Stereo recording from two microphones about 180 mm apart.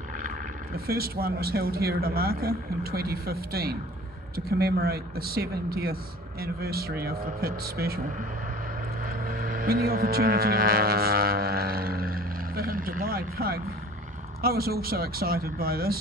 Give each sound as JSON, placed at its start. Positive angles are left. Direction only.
{"t": 0.7, "sound": "speech", "side_deg": -55}
{"t": 9.0, "sound": "vehicle", "side_deg": -55}
{"t": 14.4, "sound": "speech", "side_deg": -55}